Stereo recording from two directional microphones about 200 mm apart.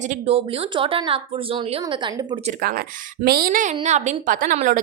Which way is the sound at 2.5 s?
45° right (ahead or behind).